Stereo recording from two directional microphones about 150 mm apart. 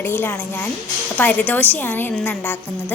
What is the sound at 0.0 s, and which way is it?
A woman's voice, 15° left (ahead or behind).